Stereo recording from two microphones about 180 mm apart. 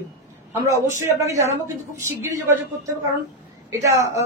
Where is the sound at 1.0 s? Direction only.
15° right (ahead or behind).